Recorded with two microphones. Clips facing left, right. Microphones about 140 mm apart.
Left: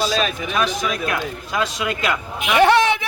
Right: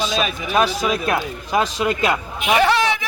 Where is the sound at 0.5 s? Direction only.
30° right (ahead or behind).